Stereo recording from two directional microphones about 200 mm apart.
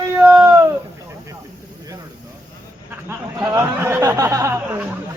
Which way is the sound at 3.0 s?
10° right (ahead or behind).